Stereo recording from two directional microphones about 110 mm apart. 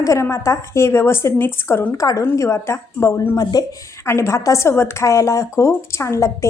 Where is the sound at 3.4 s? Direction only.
35° left (ahead or behind).